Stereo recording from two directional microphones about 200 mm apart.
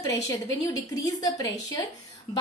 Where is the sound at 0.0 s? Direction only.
15° left (ahead or behind).